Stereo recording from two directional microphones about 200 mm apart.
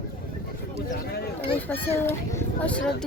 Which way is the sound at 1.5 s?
10° left (ahead or behind).